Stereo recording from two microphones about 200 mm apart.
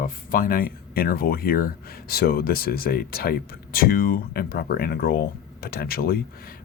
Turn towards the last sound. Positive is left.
turn(degrees=50)  # may be behind; listen again after turning